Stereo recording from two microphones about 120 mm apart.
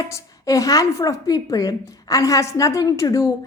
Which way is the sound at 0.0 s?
25° left (ahead or behind).